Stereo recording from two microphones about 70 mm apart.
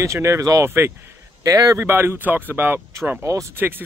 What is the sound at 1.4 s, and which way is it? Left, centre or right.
Speech, right.